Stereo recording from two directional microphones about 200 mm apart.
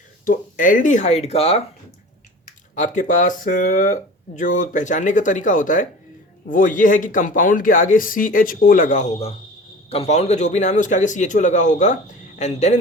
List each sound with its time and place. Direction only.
0.3 s speech: 40° left (ahead or behind)
2.7 s speech: 40° left (ahead or behind)